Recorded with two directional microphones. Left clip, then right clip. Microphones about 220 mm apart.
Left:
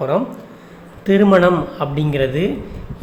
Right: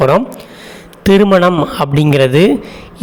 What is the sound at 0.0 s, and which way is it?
A man's voice, 45° right (ahead or behind).